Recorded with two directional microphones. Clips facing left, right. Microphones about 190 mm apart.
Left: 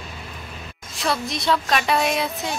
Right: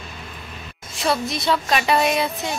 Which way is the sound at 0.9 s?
Centre (ahead or behind).